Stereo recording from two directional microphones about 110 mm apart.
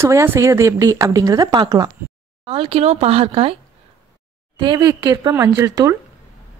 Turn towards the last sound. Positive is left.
turn(degrees=-30)  # may be behind; listen again after turning